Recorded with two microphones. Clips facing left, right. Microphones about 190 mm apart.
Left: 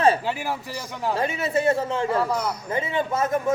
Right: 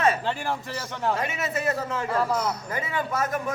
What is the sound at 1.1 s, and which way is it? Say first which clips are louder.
A man's voice: left 5 dB; 30° left (ahead or behind).